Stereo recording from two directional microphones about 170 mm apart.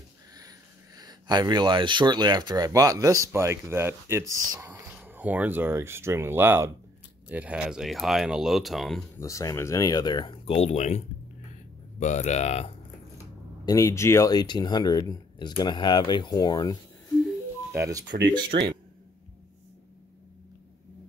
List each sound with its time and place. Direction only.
0.9 s speech: 25° right (ahead or behind); by 9.0 s centre (ahead or behind)
9.2 s speech: 20° left (ahead or behind); by 11.0 s 40° left (ahead or behind)
12.0 s speech: 45° left (ahead or behind)
13.7 s speech: 20° left (ahead or behind)
17.7 s speech: 20° right (ahead or behind)
18.5 s speech: 70° right (ahead or behind)